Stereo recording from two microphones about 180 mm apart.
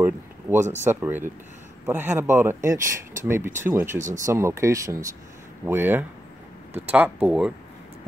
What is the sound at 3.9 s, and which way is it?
Speech, 45° right (ahead or behind).